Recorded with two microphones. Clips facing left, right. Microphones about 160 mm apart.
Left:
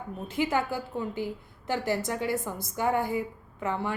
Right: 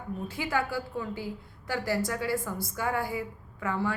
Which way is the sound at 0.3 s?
20° left (ahead or behind).